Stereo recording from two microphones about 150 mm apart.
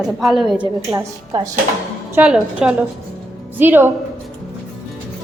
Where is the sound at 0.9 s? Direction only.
25° right (ahead or behind).